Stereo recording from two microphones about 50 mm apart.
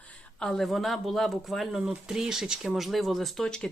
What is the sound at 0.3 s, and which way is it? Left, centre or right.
Speech, centre.